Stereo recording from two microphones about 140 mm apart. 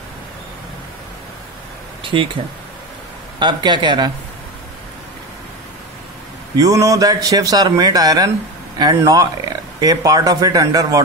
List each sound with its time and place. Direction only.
2.1 s speech: 40° right (ahead or behind)
3.3 s speech: 35° right (ahead or behind)
6.5 s a man's voice: 25° right (ahead or behind)